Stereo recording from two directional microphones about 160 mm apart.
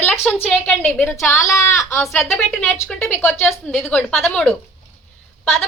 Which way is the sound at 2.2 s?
Centre (ahead or behind).